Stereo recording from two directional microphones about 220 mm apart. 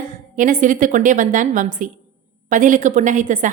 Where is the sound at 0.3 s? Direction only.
35° right (ahead or behind).